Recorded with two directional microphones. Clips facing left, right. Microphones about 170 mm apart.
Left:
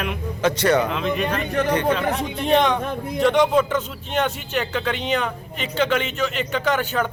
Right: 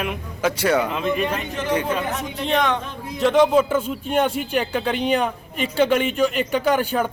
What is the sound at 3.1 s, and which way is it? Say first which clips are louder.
A man's voice: right 2 dB; centre (ahead or behind).